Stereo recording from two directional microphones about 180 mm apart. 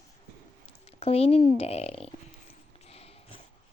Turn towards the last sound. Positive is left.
turn(degrees=35)  # may be behind; listen again after turning